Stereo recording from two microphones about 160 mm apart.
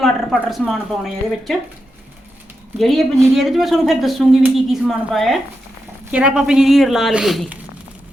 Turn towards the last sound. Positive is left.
turn(degrees=0)  # may be behind; listen again after turning